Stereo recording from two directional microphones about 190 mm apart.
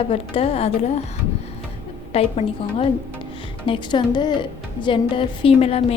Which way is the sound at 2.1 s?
30° left (ahead or behind).